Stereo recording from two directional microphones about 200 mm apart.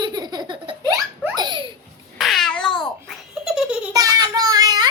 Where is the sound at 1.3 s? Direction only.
25° right (ahead or behind).